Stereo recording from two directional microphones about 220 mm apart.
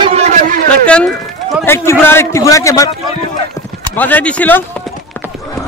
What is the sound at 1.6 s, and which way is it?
A man's voice, 10° left (ahead or behind).